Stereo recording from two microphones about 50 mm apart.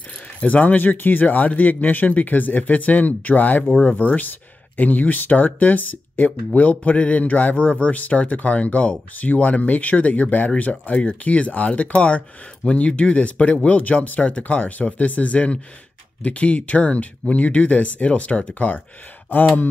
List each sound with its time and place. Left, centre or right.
0.4 s speech: left